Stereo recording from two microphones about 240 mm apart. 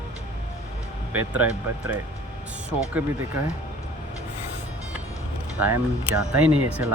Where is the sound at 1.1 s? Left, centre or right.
Right.